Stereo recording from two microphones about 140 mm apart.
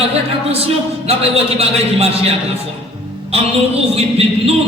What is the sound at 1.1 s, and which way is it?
Music, 45° right (ahead or behind).